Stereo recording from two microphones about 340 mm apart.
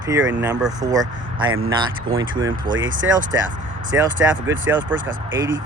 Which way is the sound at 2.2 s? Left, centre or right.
Centre.